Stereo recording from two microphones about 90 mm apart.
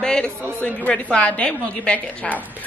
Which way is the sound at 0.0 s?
10° left (ahead or behind).